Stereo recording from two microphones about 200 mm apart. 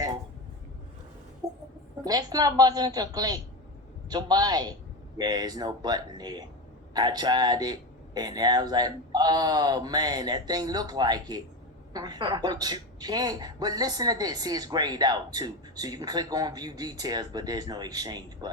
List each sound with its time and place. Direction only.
1.4 s chicken: 15° right (ahead or behind)
2.0 s a woman's voice: 20° right (ahead or behind)